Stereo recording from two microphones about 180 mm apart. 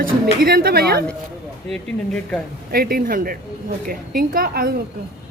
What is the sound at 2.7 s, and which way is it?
A woman's voice, 50° right (ahead or behind).